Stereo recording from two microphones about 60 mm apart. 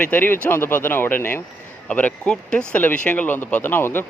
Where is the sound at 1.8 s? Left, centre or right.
Left.